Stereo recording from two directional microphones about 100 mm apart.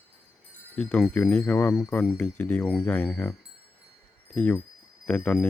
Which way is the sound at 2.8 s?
15° left (ahead or behind).